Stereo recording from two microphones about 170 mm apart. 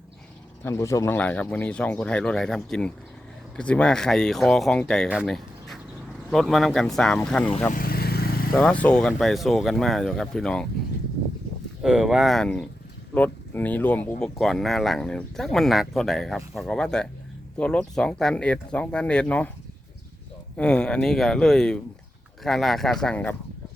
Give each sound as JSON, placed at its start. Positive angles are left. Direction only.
{"t": 0.6, "sound": "speech", "side_deg": 20}
{"t": 7.7, "sound": "vehicle", "side_deg": 60}
{"t": 8.5, "sound": "speech", "side_deg": 5}
{"t": 11.8, "sound": "speech", "side_deg": -5}
{"t": 20.6, "sound": "speech", "side_deg": 5}